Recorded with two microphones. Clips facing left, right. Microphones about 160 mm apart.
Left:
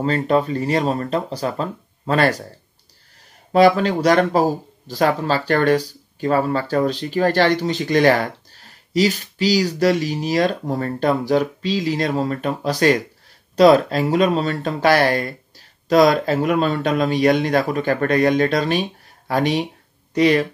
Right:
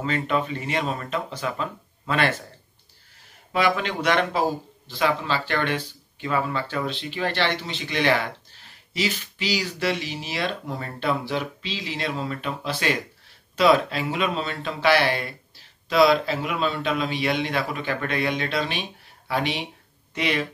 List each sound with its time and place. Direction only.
0.0 s speech: 35° left (ahead or behind)
3.5 s speech: 35° left (ahead or behind)